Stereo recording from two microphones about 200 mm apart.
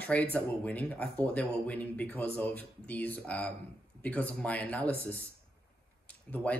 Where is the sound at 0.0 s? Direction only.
5° left (ahead or behind).